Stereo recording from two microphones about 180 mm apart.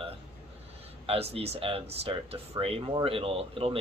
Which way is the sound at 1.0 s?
35° right (ahead or behind).